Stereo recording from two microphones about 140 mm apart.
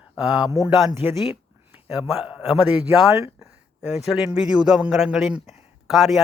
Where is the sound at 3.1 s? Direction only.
20° right (ahead or behind).